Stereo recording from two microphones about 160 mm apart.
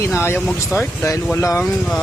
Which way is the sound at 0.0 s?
15° left (ahead or behind).